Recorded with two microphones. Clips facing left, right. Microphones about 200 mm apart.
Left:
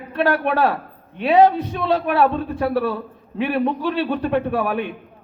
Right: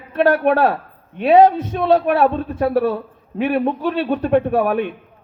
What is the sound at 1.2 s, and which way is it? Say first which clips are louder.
Speech: right 3 dB; 45° right (ahead or behind).